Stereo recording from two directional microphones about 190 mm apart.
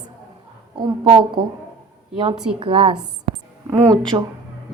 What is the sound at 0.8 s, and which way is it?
Speech, 25° right (ahead or behind).